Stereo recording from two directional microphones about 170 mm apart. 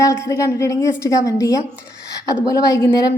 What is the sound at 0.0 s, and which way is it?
A woman's voice, 15° left (ahead or behind).